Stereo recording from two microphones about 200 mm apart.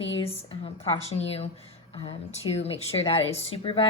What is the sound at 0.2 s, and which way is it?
A woman's voice, 30° left (ahead or behind).